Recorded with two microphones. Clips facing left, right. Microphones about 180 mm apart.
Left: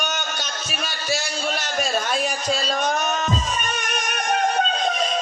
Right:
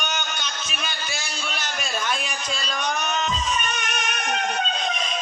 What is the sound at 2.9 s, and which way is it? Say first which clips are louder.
Music: right 1 dB; 45° left (ahead or behind).